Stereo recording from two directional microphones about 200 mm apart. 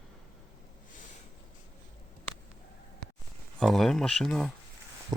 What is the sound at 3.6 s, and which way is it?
Speech, centre (ahead or behind).